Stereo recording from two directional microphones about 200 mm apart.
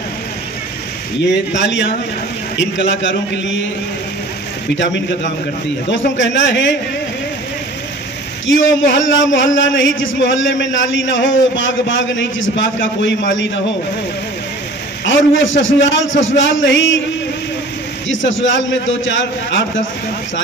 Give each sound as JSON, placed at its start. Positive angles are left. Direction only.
{"t": 1.5, "sound": "a man's voice", "side_deg": 65}
{"t": 4.7, "sound": "a man's voice", "side_deg": 65}
{"t": 8.5, "sound": "a man's voice", "side_deg": 70}
{"t": 15.0, "sound": "a man's voice", "side_deg": 70}
{"t": 18.0, "sound": "a man's voice", "side_deg": 70}